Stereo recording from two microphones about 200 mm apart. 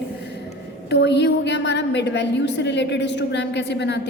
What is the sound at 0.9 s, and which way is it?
A woman's voice, 60° left (ahead or behind).